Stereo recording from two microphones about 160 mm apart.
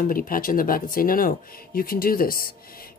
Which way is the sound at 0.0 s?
60° left (ahead or behind).